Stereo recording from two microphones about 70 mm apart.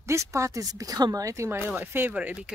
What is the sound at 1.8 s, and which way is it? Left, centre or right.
Speech, right.